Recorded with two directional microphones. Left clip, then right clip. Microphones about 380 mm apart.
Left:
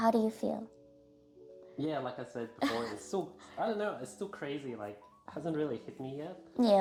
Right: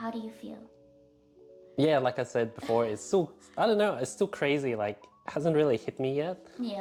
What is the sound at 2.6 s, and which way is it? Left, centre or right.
Speech, left.